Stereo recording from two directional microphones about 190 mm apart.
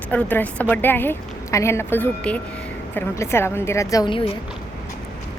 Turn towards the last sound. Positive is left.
turn(degrees=25)  # may be behind; listen again after turning